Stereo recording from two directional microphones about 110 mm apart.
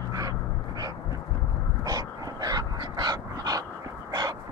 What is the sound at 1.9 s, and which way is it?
Dog, 35° right (ahead or behind).